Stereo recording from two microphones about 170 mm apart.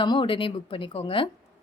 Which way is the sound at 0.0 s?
30° left (ahead or behind).